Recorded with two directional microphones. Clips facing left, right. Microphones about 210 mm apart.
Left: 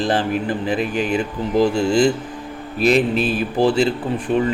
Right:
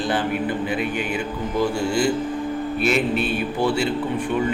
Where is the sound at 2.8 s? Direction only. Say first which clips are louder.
Left 6 dB; 35° left (ahead or behind).